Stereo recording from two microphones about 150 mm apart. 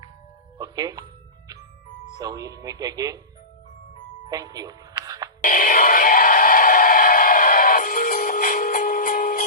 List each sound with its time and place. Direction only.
0.6 s music: 25° right (ahead or behind)
2.1 s speech: 25° right (ahead or behind)
4.3 s music: 25° right (ahead or behind)
5.4 s synthetic singing: 65° left (ahead or behind)